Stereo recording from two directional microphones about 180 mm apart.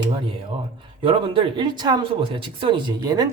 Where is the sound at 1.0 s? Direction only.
30° right (ahead or behind).